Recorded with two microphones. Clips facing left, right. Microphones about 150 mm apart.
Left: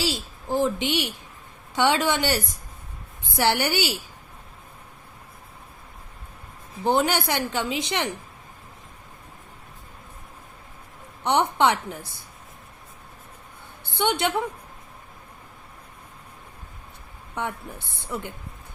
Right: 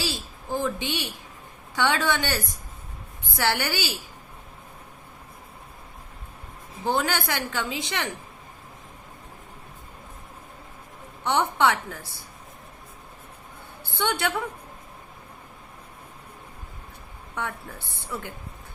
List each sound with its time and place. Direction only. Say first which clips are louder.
0.0 s a sound: left 4 dB; 20° left (ahead or behind)
1.7 s a woman's voice: left 2 dB; 20° left (ahead or behind)
6.8 s a woman's voice: left 4 dB; 20° left (ahead or behind)
11.2 s a woman's voice: left 2 dB; 20° left (ahead or behind)
13.9 s a woman's voice: left 3 dB; 20° left (ahead or behind)
17.3 s a woman's voice: left 2 dB; 20° left (ahead or behind)